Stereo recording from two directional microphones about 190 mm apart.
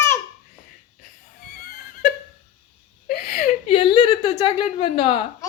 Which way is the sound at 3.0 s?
50° left (ahead or behind).